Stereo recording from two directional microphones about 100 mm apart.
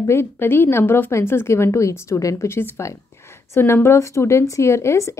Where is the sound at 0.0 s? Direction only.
25° left (ahead or behind).